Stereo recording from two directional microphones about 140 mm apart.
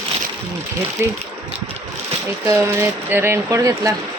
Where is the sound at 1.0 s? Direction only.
20° right (ahead or behind).